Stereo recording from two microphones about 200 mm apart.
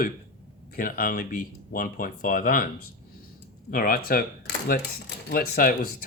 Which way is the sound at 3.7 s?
45° left (ahead or behind).